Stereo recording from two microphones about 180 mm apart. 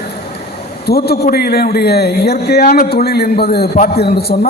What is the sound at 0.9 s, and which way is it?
A man's voice, 60° left (ahead or behind).